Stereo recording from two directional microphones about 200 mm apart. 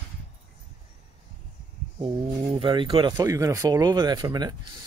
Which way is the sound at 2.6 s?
25° right (ahead or behind).